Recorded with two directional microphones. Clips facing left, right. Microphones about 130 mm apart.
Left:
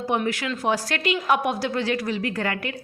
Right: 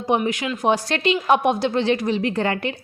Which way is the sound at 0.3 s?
20° right (ahead or behind).